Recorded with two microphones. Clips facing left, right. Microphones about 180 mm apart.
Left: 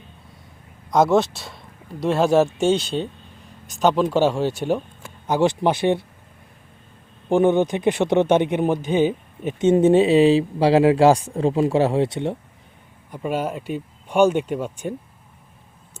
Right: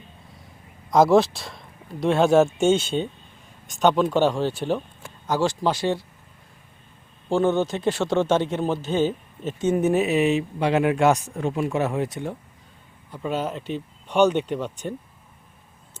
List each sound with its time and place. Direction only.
0.9 s speech: centre (ahead or behind)
5.2 s speech: 20° left (ahead or behind)
7.3 s a man's voice: 15° left (ahead or behind)
9.6 s speech: 25° left (ahead or behind)
13.1 s a man's voice: 10° left (ahead or behind)